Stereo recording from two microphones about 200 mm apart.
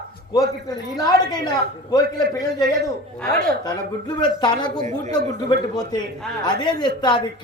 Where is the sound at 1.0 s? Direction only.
20° left (ahead or behind).